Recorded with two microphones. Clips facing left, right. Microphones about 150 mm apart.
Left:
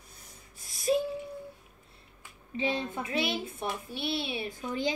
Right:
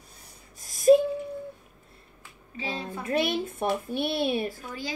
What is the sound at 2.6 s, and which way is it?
Speech, 20° left (ahead or behind).